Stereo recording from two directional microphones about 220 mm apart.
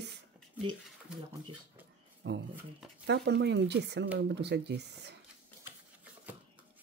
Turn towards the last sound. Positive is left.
turn(degrees=-50)  # may be behind; listen again after turning